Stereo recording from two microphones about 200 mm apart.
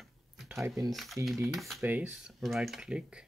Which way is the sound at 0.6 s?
15° right (ahead or behind).